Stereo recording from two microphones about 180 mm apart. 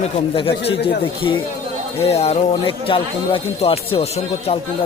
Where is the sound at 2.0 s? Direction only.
35° left (ahead or behind).